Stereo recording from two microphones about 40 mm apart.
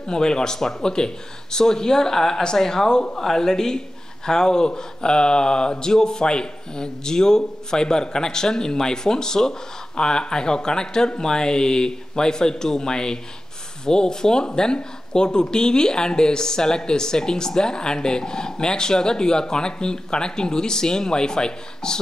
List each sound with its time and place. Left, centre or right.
0.1 s speech: centre